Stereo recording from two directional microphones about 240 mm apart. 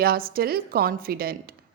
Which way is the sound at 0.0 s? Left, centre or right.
Right.